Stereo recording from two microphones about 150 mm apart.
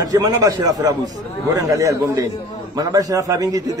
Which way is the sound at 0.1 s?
25° right (ahead or behind).